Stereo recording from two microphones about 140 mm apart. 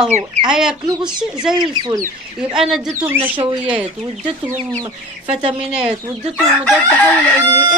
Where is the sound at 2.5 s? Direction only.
5° right (ahead or behind).